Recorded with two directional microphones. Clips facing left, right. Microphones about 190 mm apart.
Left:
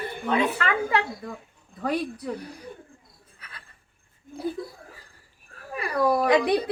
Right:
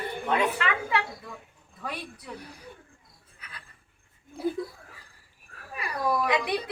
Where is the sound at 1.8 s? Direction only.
50° left (ahead or behind).